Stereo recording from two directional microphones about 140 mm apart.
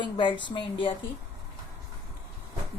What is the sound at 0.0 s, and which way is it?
Speech, 35° left (ahead or behind).